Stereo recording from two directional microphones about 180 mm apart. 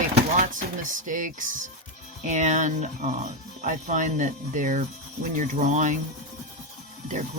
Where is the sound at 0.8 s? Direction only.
45° right (ahead or behind).